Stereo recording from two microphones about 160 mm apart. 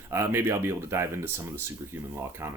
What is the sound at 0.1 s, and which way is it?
Speech, 15° right (ahead or behind).